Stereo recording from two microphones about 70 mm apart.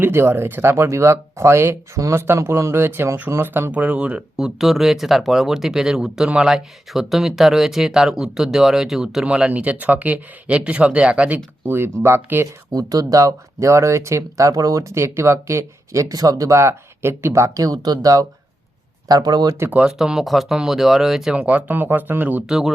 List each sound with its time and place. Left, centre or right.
0.0 s speech: right
3.7 s speech: centre
4.4 s speech: centre
11.6 s speech: right
12.7 s speech: right
19.0 s speech: right
19.8 s speech: centre
21.3 s speech: centre
22.4 s speech: centre